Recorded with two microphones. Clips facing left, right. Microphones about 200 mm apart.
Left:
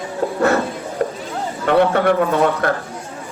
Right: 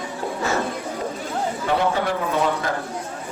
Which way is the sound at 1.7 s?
60° left (ahead or behind).